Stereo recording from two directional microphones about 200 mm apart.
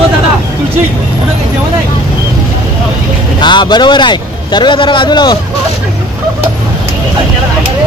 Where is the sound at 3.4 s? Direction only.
20° left (ahead or behind).